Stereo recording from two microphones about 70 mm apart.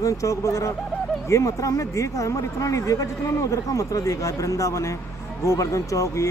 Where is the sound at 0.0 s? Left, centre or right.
Left.